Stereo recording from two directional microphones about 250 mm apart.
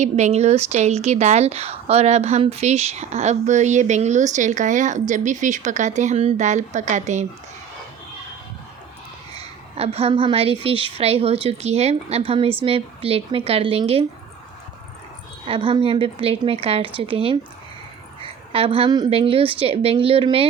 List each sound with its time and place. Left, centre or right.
0.0 s speech: right
9.4 s speech: right
15.4 s speech: right